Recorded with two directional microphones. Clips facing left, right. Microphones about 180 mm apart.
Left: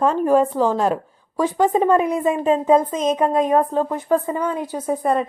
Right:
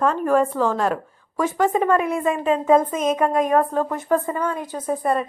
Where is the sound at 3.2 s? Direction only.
20° left (ahead or behind).